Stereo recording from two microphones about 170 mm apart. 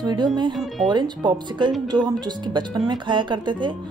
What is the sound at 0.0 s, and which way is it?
Speech, 25° right (ahead or behind).